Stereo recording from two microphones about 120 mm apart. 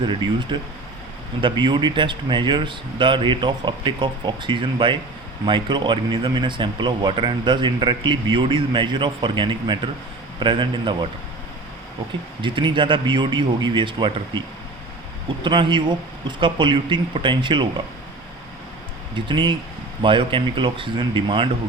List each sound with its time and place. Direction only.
0.0 s speech: 40° right (ahead or behind)
12.4 s speech: 45° right (ahead or behind)
15.4 s speech: 40° right (ahead or behind)
19.1 s speech: 40° right (ahead or behind)